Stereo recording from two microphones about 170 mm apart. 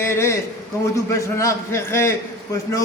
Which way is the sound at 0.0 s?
15° left (ahead or behind).